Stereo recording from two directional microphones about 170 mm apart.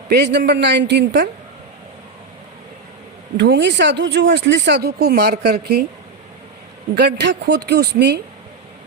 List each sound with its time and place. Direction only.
0.1 s speech: 80° right
3.3 s speech: 90° right; by 5.8 s 70° right (ahead or behind)
6.9 s speech: 80° right